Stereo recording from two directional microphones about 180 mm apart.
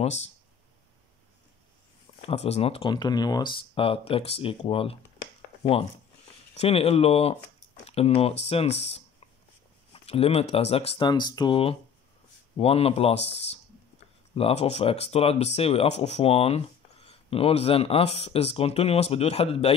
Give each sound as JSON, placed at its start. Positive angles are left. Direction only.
{"t": 0.0, "sound": "speech", "side_deg": 35}
{"t": 2.2, "sound": "speech", "side_deg": 35}
{"t": 10.0, "sound": "speech", "side_deg": 35}